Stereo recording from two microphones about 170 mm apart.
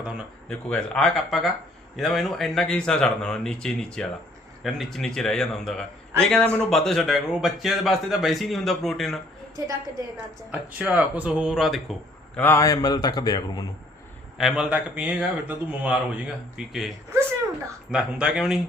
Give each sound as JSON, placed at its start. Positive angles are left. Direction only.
{"t": 0.0, "sound": "a sound", "side_deg": -5}
{"t": 0.4, "sound": "a man's voice", "side_deg": 5}
{"t": 10.7, "sound": "speech", "side_deg": -10}
{"t": 12.4, "sound": "a man's voice", "side_deg": 15}
{"t": 14.3, "sound": "a man's voice", "side_deg": -5}
{"t": 17.9, "sound": "a man's voice", "side_deg": -5}